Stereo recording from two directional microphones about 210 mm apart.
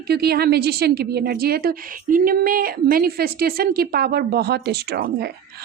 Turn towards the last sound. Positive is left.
turn(degrees=-50)  # may be behind; listen again after turning